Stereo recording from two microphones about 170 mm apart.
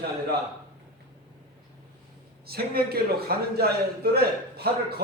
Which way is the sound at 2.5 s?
65° right (ahead or behind).